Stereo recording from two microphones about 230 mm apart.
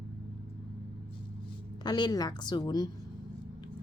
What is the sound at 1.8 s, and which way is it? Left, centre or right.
Speech, centre.